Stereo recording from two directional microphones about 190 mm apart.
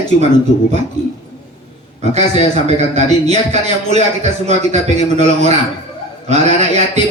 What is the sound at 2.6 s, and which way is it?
A man's voice, 35° right (ahead or behind).